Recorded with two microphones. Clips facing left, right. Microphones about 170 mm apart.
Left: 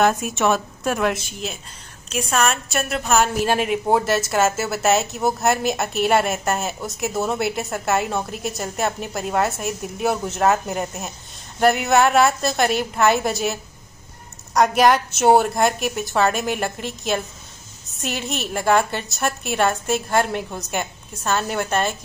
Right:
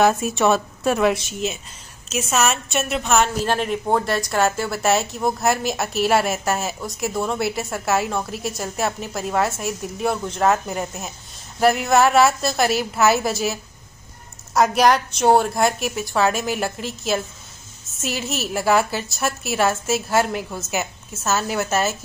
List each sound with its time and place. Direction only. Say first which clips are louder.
0.0 s a woman's voice: right 1 dB; centre (ahead or behind)